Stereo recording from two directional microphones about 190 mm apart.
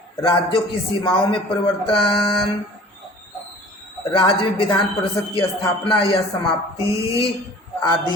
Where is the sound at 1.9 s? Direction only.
30° left (ahead or behind).